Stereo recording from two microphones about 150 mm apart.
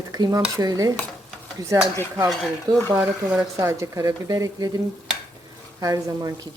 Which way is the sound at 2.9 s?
5° right (ahead or behind).